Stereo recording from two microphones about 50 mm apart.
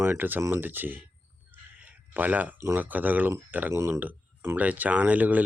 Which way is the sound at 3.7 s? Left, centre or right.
Right.